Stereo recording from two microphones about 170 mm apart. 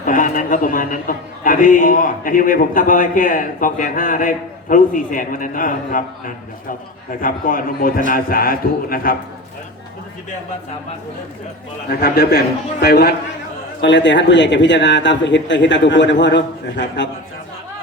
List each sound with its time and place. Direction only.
0.0 s a man's voice: 50° left (ahead or behind)
11.9 s a man's voice: 65° left (ahead or behind)
13.8 s a man's voice: 90° left